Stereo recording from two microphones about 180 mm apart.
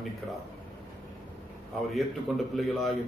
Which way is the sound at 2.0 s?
Centre (ahead or behind).